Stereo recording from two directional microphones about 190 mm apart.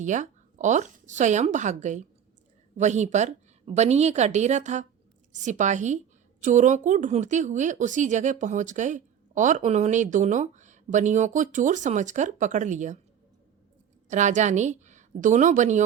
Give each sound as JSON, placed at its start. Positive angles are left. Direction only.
{"t": 0.0, "sound": "a woman's voice", "side_deg": -40}
{"t": 14.1, "sound": "a woman's voice", "side_deg": -40}